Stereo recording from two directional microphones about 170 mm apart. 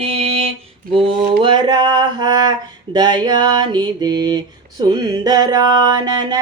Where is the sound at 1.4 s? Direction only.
25° right (ahead or behind).